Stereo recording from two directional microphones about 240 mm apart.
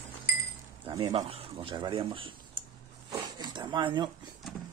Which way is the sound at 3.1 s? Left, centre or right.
Centre.